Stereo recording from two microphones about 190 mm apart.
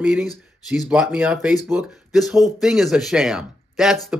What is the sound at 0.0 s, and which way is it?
Speech, 5° right (ahead or behind).